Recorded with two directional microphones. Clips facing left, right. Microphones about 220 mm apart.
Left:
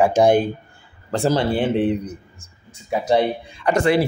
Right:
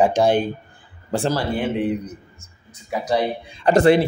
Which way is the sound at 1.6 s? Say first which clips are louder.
Left 3 dB; 30° left (ahead or behind).